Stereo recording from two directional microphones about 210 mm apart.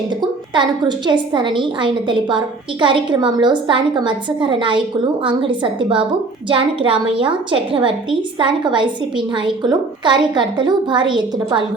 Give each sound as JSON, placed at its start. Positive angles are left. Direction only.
{"t": 0.2, "sound": "a woman's voice", "side_deg": -20}